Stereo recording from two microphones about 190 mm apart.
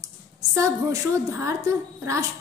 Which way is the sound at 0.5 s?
15° right (ahead or behind).